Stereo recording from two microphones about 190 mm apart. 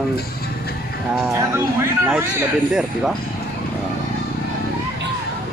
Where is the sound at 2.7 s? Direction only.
5° right (ahead or behind).